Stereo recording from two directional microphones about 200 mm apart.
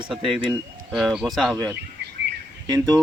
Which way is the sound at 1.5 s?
15° right (ahead or behind).